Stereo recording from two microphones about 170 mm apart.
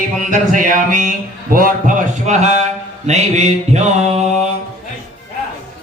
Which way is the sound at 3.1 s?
40° right (ahead or behind).